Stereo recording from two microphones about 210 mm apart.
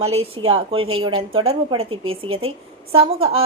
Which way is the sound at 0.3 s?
25° right (ahead or behind).